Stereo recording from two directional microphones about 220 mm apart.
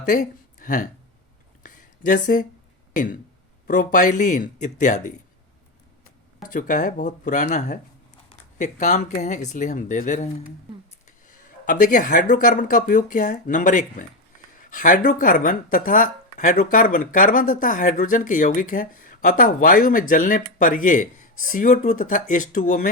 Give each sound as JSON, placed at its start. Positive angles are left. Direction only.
{"t": 0.0, "sound": "a sound", "side_deg": 35}
{"t": 2.9, "sound": "speech", "side_deg": 35}
{"t": 6.4, "sound": "speech", "side_deg": 40}